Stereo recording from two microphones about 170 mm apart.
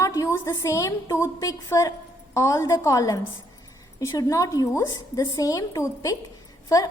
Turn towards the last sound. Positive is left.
turn(degrees=20)  # may be behind; listen again after turning